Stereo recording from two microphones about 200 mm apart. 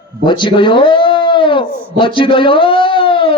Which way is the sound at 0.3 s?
25° left (ahead or behind).